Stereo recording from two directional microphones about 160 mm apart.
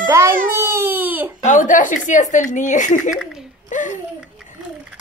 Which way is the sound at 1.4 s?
55° left (ahead or behind).